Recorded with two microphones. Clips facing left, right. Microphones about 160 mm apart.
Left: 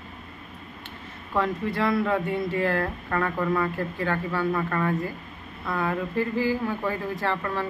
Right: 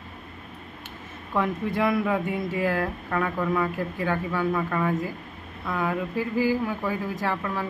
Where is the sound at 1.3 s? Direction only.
15° right (ahead or behind).